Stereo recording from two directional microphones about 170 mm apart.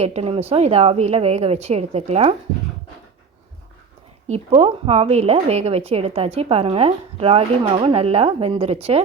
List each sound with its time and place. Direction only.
0.0 s a woman's voice: 35° right (ahead or behind)
4.3 s a woman's voice: 35° right (ahead or behind)